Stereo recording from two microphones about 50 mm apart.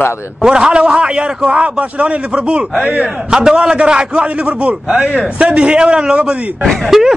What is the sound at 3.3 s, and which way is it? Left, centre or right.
A man's voice, centre.